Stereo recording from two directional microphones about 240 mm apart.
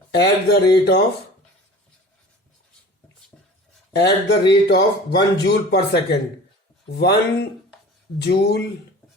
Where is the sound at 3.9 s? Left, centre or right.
Left.